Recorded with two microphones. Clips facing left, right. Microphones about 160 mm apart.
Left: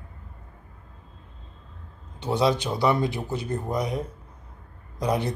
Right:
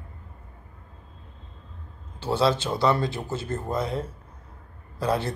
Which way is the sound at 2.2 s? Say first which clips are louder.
Even; 15° left (ahead or behind).